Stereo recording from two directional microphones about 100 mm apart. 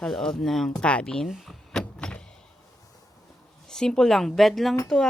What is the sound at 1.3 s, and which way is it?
Power windows, centre (ahead or behind).